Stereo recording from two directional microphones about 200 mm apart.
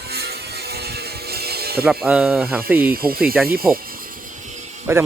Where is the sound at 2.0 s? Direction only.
5° right (ahead or behind).